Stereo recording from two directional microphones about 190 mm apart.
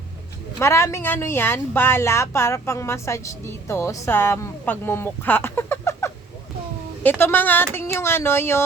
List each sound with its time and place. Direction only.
0.6 s a woman's voice: 15° left (ahead or behind)